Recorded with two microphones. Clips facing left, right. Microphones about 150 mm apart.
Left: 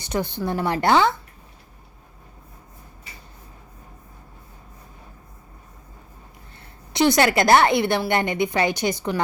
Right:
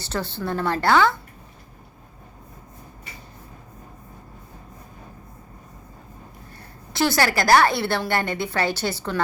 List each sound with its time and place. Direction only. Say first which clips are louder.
0.0 s a woman's voice: left 3 dB; 15° left (ahead or behind)
6.9 s a woman's voice: left 3 dB; 20° left (ahead or behind)